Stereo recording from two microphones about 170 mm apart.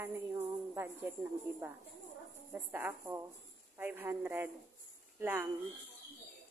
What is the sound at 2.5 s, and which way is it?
Speech, 10° right (ahead or behind).